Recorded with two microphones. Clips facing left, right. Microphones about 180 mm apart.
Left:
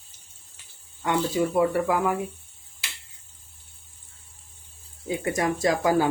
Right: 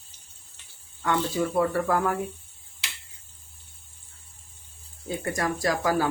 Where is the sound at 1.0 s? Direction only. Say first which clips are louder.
Left 2 dB; 20° left (ahead or behind).